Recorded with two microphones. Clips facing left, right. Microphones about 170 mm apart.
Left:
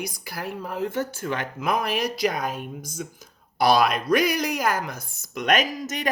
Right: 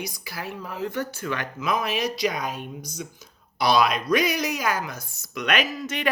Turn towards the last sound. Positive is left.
turn(degrees=40)  # may be behind; listen again after turning